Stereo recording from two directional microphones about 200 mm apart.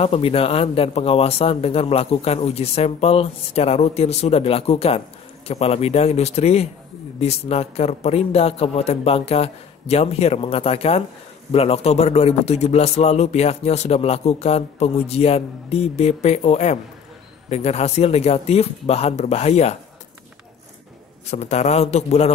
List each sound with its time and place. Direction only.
0.0 s a man's voice: 30° left (ahead or behind)
21.3 s a man's voice: 35° left (ahead or behind)